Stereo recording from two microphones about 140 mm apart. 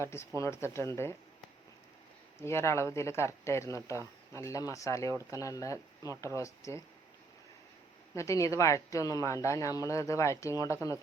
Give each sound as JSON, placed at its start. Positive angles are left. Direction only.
{"t": 0.0, "sound": "speech", "side_deg": 20}
{"t": 2.4, "sound": "speech", "side_deg": 20}
{"t": 8.1, "sound": "speech", "side_deg": 20}